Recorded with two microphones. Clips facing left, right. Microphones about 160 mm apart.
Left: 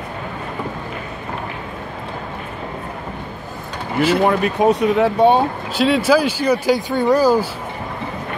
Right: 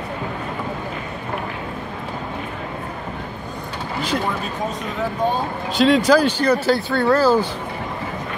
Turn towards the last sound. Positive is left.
turn(degrees=15)  # may be behind; listen again after turning